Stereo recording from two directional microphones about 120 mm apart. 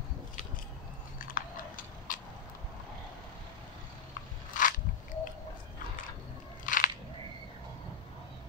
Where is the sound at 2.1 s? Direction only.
90° left.